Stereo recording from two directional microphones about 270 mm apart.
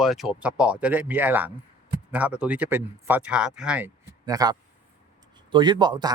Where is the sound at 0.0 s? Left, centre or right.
Centre.